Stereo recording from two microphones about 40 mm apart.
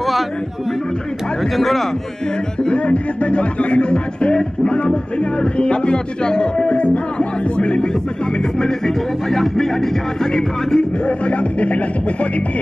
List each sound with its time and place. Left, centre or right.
1.4 s a man's voice: centre
2.6 s music: left
11.1 s speech: left